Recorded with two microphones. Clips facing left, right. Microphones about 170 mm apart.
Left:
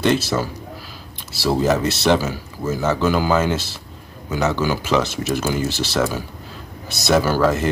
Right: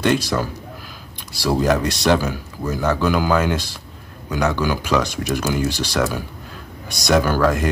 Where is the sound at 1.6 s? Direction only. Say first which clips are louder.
Even; 5° left (ahead or behind).